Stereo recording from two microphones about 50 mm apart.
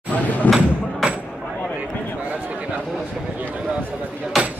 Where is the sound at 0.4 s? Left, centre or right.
Left.